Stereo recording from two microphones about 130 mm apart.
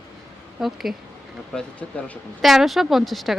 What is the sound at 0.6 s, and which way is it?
Speech, centre (ahead or behind).